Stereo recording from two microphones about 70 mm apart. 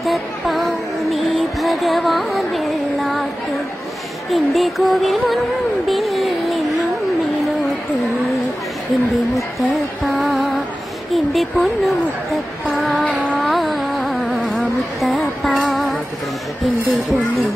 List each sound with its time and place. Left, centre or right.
0.0 s music: centre
4.3 s music: centre
9.1 s music: centre
11.1 s speech: centre
13.0 s music: centre
13.4 s carnatic music: centre
14.4 s vehicle: centre
15.7 s music: centre